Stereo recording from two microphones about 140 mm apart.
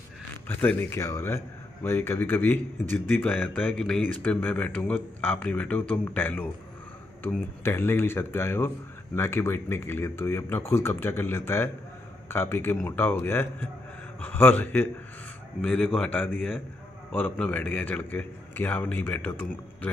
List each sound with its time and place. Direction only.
0.5 s a man's voice: 15° left (ahead or behind)